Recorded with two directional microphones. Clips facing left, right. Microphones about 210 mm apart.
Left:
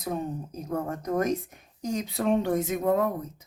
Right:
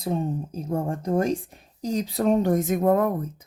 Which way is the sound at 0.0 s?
30° right (ahead or behind).